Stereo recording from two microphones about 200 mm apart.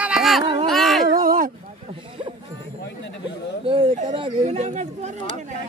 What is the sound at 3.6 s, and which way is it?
A man's voice, 25° right (ahead or behind).